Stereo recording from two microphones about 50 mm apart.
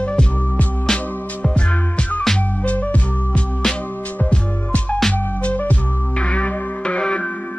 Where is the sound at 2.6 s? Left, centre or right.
Left.